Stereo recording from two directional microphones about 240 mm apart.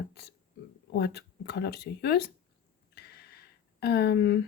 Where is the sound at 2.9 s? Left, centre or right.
Left.